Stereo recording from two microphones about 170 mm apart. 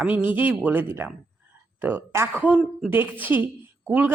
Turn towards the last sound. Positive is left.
turn(degrees=-10)  # may be behind; listen again after turning